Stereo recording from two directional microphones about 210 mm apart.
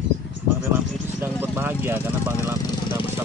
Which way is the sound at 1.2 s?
10° right (ahead or behind).